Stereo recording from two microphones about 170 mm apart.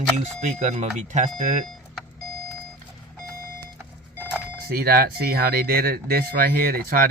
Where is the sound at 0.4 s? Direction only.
45° right (ahead or behind).